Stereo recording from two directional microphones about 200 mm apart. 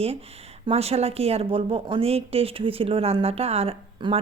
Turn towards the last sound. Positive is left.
turn(degrees=-30)  # may be behind; listen again after turning